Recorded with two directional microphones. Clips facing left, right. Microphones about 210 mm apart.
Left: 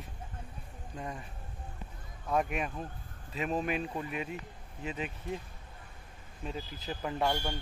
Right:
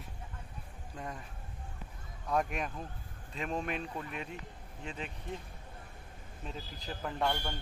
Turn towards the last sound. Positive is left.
turn(degrees=10)  # may be behind; listen again after turning